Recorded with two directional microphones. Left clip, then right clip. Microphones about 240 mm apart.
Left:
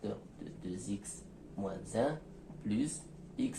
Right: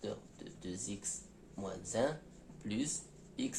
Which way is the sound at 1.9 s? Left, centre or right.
Right.